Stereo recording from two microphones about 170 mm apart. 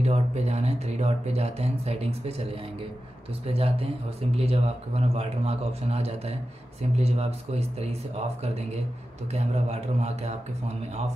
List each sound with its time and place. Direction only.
0.0 s speech: 40° right (ahead or behind)
9.3 s speech: 40° right (ahead or behind)